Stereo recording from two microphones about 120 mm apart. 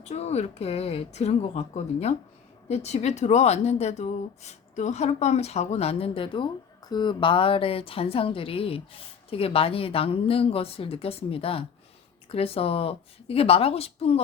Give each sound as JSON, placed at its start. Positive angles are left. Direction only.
{"t": 0.0, "sound": "a woman's voice", "side_deg": 65}